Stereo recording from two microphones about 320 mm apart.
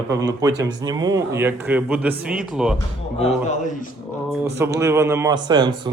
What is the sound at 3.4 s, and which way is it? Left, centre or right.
Speech, left.